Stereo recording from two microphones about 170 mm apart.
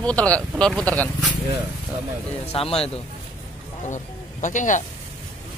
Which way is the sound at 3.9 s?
45° left (ahead or behind).